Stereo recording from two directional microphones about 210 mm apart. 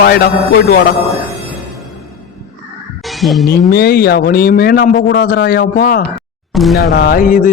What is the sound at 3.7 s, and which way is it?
A man's voice, 50° left (ahead or behind).